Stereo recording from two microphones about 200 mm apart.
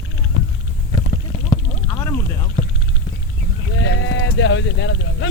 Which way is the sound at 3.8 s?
70° left (ahead or behind).